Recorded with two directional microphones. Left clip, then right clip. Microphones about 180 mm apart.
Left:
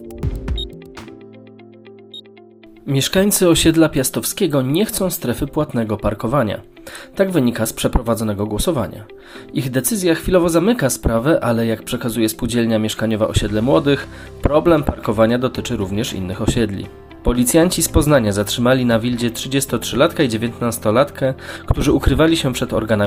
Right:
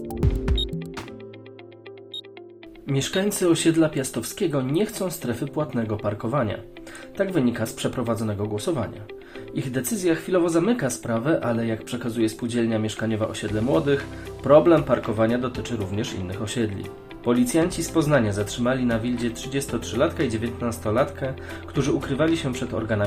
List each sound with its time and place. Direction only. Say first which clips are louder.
0.1 s music: right 2 dB; centre (ahead or behind)
2.9 s speech: left 8 dB; 35° left (ahead or behind)